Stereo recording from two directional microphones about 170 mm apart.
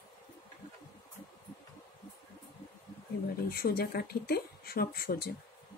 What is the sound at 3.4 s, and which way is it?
Speech, 65° left (ahead or behind).